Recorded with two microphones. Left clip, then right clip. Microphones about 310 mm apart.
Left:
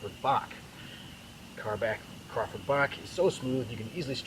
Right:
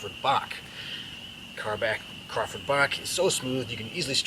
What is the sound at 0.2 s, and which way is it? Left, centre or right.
Speech, centre.